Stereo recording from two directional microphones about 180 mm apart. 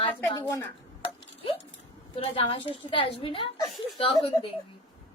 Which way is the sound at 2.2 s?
30° left (ahead or behind).